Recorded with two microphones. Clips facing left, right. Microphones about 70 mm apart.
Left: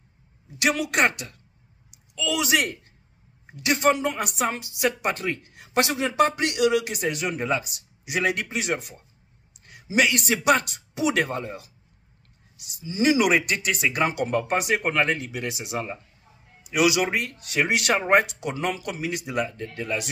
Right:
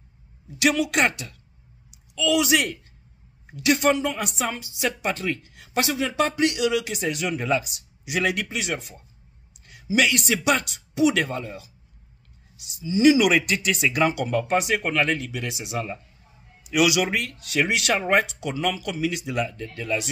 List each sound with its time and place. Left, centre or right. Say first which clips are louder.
0.6 s speech: right 1 dB; left
4.4 s speech: left 2 dB; left
4.8 s speech: left 1 dB; left
12.6 s speech: right 5 dB; left
18.2 s speech: right 1 dB; left